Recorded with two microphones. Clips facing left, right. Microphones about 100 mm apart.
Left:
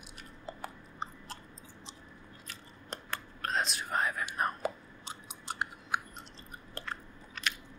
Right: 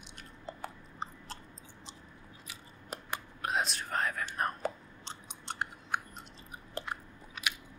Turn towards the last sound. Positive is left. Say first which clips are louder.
# even
turn(degrees=-10)  # may be behind; listen again after turning